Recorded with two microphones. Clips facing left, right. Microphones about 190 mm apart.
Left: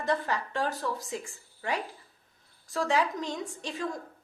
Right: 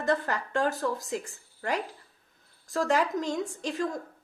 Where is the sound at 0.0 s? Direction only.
45° right (ahead or behind).